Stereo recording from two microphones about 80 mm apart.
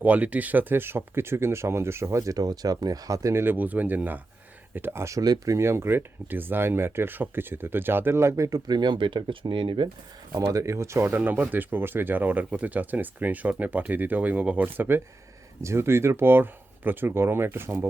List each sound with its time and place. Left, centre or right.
0.0 s speech: centre; by 3.4 s right
3.4 s speech: right
5.2 s speech: right
5.5 s speech: right
8.4 s speech: right
10.4 s speech: right